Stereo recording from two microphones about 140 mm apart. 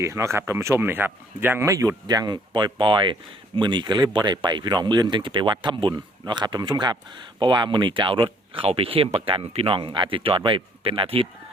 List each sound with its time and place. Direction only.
0.0 s speech: 20° right (ahead or behind); by 11.3 s 40° right (ahead or behind)